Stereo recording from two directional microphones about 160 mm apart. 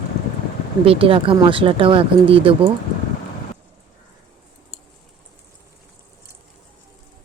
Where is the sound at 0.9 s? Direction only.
35° right (ahead or behind).